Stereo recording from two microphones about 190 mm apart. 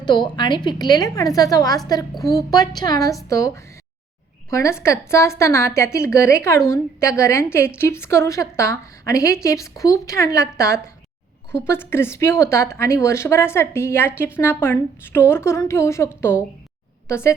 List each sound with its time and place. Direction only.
0.0 s a woman's voice: 25° left (ahead or behind)
2.1 s a woman's voice: centre (ahead or behind)
2.5 s a woman's voice: 20° left (ahead or behind)